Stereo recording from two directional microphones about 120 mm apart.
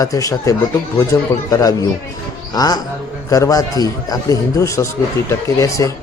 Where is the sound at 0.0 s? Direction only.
30° left (ahead or behind).